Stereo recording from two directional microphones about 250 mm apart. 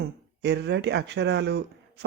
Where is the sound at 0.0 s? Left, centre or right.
Right.